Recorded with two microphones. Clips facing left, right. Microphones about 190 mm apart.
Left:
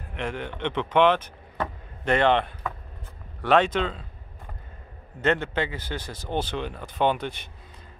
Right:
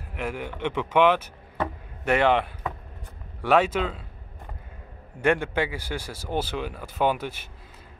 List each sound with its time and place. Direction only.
0.1 s speech: 5° right (ahead or behind)
5.2 s speech: 10° right (ahead or behind)